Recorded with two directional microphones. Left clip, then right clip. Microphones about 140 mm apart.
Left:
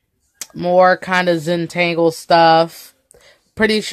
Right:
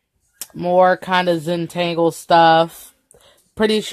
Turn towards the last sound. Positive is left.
turn(degrees=0)  # may be behind; listen again after turning